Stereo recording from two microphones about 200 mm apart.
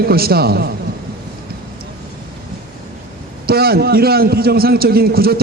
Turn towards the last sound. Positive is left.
turn(degrees=-50)  # may be behind; listen again after turning